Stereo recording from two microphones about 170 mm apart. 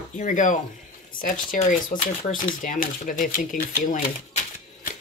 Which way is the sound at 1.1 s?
55° left (ahead or behind).